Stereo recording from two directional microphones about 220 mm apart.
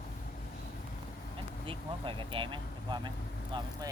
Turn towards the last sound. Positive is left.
turn(degrees=-20)  # may be behind; listen again after turning